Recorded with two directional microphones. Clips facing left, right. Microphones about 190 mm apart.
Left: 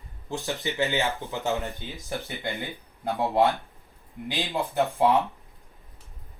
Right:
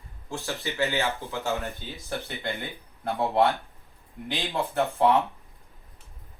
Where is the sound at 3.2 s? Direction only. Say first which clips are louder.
Even; 15° left (ahead or behind).